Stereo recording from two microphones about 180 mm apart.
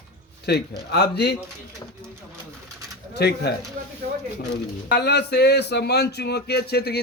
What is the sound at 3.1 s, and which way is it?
Speech, 65° left (ahead or behind).